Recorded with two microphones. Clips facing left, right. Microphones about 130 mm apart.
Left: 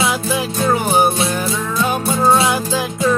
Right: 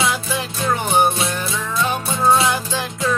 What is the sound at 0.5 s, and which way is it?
Music, 35° left (ahead or behind).